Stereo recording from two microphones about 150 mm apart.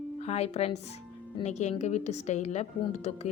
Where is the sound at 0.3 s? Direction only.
45° left (ahead or behind).